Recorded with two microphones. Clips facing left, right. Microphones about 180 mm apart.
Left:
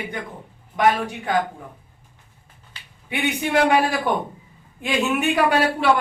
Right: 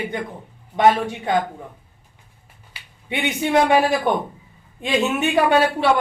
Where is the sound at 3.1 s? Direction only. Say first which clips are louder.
Right 1 dB; 25° right (ahead or behind).